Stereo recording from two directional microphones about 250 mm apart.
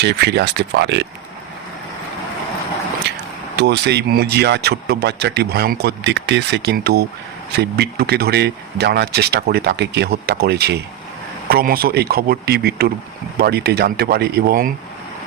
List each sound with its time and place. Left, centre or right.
0.0 s speech: right
3.1 s a sound: right
3.5 s speech: right